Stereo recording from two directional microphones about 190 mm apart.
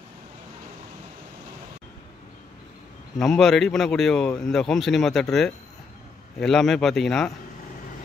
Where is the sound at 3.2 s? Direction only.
Centre (ahead or behind).